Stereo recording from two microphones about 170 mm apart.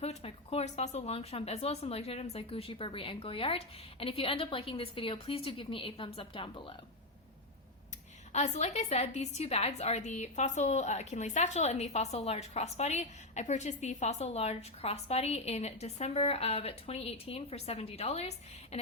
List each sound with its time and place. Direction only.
0.0 s a woman's voice: 35° left (ahead or behind)
8.3 s a woman's voice: 40° left (ahead or behind)